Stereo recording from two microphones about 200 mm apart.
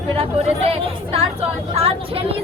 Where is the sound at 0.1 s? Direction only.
30° right (ahead or behind).